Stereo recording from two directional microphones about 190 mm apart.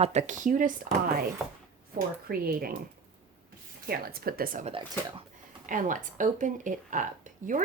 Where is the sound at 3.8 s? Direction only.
55° right (ahead or behind).